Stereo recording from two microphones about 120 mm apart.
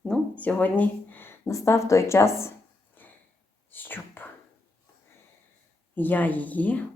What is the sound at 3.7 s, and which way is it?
Whispering, 15° left (ahead or behind).